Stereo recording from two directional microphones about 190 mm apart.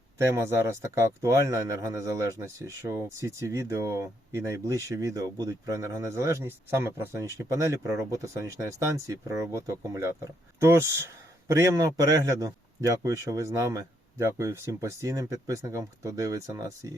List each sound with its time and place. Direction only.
0.2 s speech: 15° right (ahead or behind)